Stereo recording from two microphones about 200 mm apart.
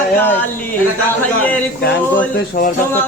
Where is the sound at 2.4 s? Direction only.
45° left (ahead or behind).